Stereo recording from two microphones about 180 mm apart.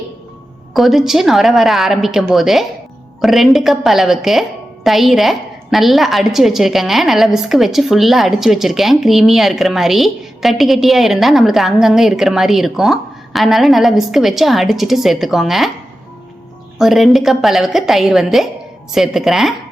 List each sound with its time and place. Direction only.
0.7 s a woman's voice: centre (ahead or behind)
16.7 s a woman's voice: centre (ahead or behind)